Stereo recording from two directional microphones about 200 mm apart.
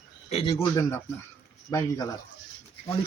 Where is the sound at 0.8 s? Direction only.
10° left (ahead or behind).